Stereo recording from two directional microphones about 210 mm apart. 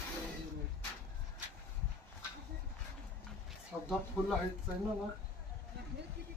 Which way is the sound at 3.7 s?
10° right (ahead or behind).